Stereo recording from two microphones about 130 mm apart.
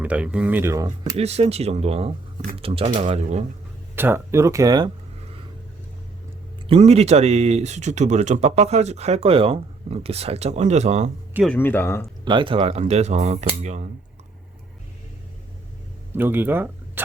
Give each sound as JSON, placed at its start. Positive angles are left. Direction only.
{"t": 0.0, "sound": "speech", "side_deg": -10}
{"t": 1.1, "sound": "speech", "side_deg": -50}
{"t": 3.9, "sound": "speech", "side_deg": -15}
{"t": 6.7, "sound": "speech", "side_deg": -50}
{"t": 11.4, "sound": "speech", "side_deg": 15}
{"t": 12.2, "sound": "speech", "side_deg": -40}
{"t": 12.8, "sound": "speech", "side_deg": -60}
{"t": 16.1, "sound": "speech", "side_deg": -15}